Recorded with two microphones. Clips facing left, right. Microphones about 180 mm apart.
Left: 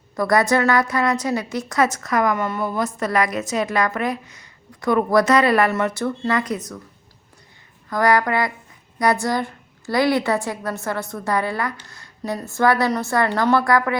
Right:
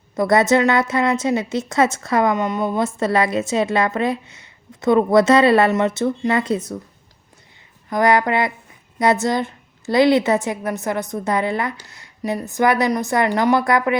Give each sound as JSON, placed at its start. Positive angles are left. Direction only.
{"t": 0.2, "sound": "a woman's voice", "side_deg": -25}
{"t": 7.9, "sound": "a woman's voice", "side_deg": -20}